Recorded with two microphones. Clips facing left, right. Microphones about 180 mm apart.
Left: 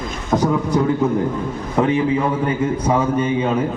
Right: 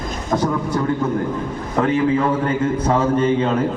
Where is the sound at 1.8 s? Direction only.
15° left (ahead or behind).